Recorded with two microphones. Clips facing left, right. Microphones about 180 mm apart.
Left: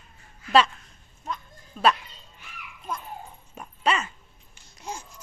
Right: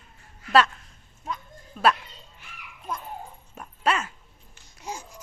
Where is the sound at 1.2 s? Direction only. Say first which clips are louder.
Even; 5° right (ahead or behind).